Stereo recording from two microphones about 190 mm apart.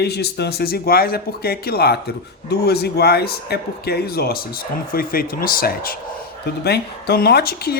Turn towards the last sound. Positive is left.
turn(degrees=55)  # may be behind; listen again after turning